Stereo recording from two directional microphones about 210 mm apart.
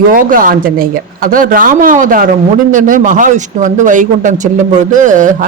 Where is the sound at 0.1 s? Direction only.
40° right (ahead or behind).